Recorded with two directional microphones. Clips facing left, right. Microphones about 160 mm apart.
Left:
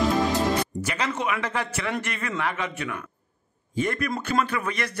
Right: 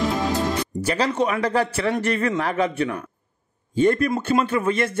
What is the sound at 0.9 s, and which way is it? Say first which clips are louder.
A man's voice: right 9 dB; 35° right (ahead or behind).